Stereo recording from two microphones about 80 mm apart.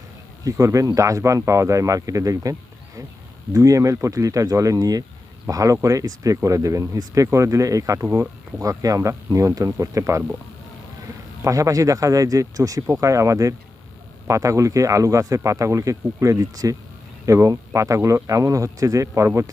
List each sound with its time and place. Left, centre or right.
0.4 s speech: right
11.4 s speech: right